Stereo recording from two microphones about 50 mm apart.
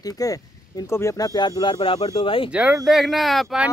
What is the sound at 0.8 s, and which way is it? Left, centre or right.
Speech, left.